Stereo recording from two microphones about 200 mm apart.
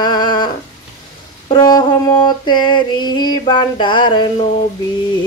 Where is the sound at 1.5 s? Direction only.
20° left (ahead or behind).